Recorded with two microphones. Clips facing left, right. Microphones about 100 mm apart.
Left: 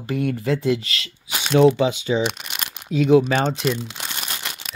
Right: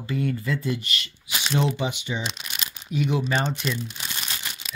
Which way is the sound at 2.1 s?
70° left (ahead or behind).